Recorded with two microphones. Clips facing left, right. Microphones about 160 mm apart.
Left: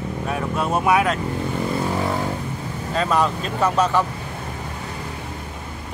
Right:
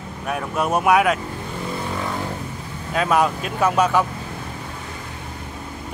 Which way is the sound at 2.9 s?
5° right (ahead or behind).